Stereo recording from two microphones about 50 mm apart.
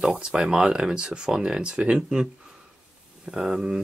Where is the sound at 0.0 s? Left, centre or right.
Centre.